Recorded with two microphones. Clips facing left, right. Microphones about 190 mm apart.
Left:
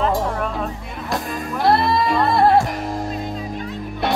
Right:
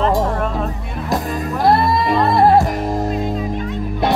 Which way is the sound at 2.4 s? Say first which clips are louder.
Right 4 dB; 40° right (ahead or behind).